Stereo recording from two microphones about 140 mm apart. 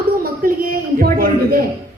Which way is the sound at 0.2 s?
90° right.